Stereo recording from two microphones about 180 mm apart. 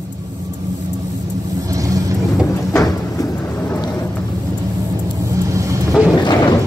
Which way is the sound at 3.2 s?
20° left (ahead or behind).